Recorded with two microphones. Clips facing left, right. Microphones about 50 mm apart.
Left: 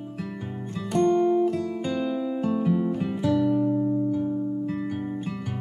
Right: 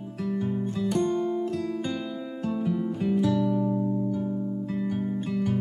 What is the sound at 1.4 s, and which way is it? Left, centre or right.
Music, centre.